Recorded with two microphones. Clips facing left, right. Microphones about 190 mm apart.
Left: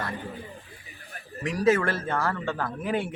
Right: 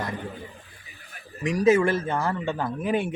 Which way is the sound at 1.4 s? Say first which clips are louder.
Right 3 dB; 15° right (ahead or behind).